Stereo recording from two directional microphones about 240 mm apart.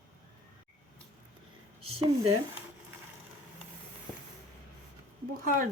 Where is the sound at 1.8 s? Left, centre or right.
Right.